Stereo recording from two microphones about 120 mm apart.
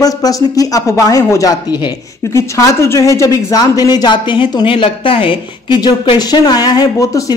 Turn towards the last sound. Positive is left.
turn(degrees=35)  # may be behind; listen again after turning